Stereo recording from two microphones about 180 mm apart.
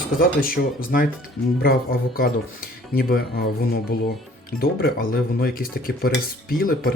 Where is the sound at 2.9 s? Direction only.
55° left (ahead or behind).